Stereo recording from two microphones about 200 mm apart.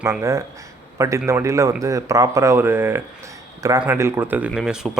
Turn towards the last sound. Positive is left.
turn(degrees=-5)  # may be behind; listen again after turning